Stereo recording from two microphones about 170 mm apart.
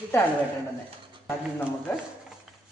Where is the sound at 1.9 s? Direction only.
15° left (ahead or behind).